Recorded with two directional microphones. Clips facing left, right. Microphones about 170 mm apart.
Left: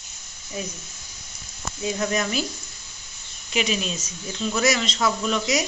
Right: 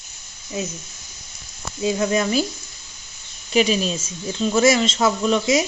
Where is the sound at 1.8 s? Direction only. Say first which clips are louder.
Right 5 dB; 25° right (ahead or behind).